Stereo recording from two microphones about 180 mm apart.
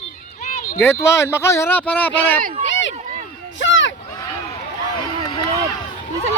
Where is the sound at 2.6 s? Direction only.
90° left.